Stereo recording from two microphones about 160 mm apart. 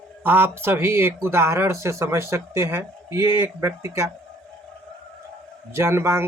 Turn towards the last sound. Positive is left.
turn(degrees=-15)  # may be behind; listen again after turning